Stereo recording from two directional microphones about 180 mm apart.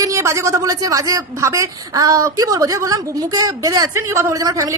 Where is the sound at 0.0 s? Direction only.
15° right (ahead or behind).